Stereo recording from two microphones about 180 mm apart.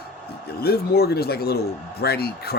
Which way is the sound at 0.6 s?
60° left (ahead or behind).